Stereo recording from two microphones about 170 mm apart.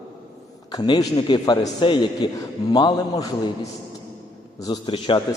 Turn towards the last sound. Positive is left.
turn(degrees=30)  # may be behind; listen again after turning